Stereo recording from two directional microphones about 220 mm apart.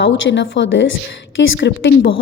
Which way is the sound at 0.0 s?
55° left (ahead or behind).